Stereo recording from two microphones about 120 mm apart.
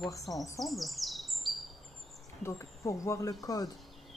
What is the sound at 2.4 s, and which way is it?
Speech, 25° left (ahead or behind).